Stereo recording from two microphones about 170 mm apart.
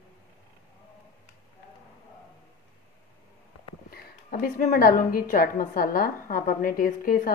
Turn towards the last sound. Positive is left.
turn(degrees=55)  # may be behind; listen again after turning